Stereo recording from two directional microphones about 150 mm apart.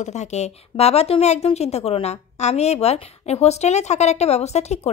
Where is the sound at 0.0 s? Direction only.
50° left (ahead or behind).